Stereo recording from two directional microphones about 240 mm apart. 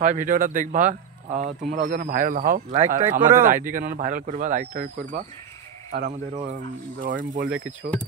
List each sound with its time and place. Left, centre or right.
0.0 s speech: right
7.1 s speech: right